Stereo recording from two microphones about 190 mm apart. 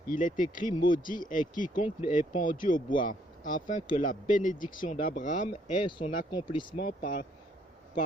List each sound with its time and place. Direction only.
0.1 s speech: 45° left (ahead or behind)
5.8 s speech: 25° left (ahead or behind)
6.7 s speech: 50° left (ahead or behind)